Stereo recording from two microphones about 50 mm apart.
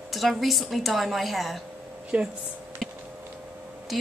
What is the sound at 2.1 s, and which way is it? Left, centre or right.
Speech, centre.